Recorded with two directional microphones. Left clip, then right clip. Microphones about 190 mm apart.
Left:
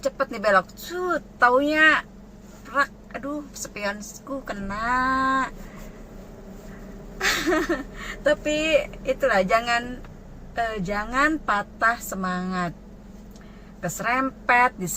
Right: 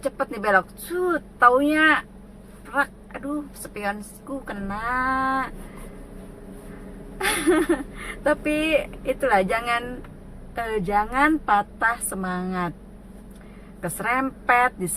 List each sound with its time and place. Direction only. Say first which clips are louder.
0.0 s speech: left 1 dB; 15° right (ahead or behind)
4.4 s speech: left 2 dB; 15° right (ahead or behind)
7.2 s speech: right 1 dB; 15° right (ahead or behind)
13.8 s speech: even; 15° right (ahead or behind)